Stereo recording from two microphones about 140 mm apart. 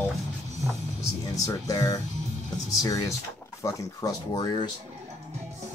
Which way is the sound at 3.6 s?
25° left (ahead or behind).